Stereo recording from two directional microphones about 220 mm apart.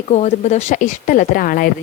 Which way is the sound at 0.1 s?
30° left (ahead or behind).